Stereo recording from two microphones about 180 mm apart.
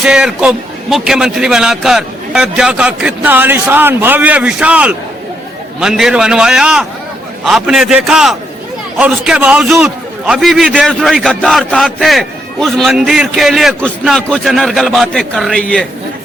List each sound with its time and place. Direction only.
0.0 s a man's voice: 5° right (ahead or behind)